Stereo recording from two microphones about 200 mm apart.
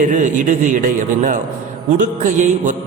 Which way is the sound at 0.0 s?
40° right (ahead or behind).